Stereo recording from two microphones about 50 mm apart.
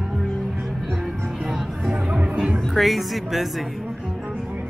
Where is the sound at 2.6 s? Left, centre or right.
Centre.